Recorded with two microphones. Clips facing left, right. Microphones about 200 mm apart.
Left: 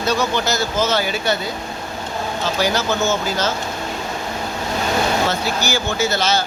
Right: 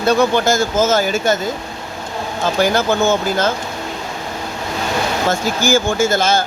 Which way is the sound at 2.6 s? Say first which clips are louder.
Right 5 dB; 55° right (ahead or behind).